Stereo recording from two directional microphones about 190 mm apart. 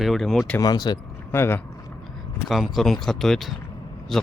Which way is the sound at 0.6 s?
20° left (ahead or behind).